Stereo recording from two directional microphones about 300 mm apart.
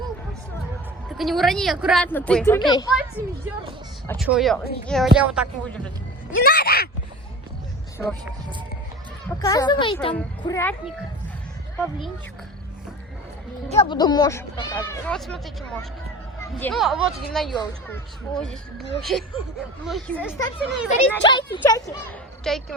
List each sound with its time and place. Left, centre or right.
1.1 s speech: centre
4.0 s speech: centre
6.4 s speech: left
9.4 s speech: centre
13.7 s speech: centre
21.2 s speech: centre
22.5 s speech: centre